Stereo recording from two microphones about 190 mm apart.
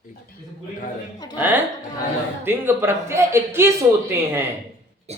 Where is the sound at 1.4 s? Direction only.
10° right (ahead or behind).